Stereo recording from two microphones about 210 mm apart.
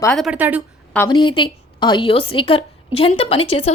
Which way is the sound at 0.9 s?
15° left (ahead or behind).